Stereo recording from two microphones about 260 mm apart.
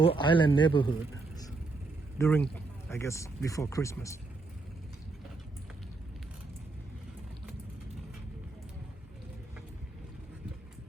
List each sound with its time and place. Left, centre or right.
0.0 s a man's voice: centre